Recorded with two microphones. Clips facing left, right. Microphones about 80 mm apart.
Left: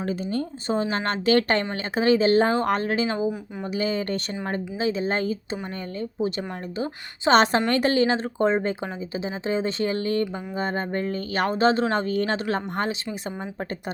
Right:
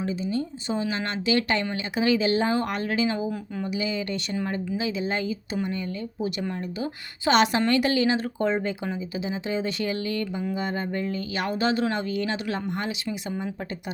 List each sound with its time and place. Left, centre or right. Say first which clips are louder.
0.0 s speech: left 1 dB; left
6.7 s speech: left 2 dB; left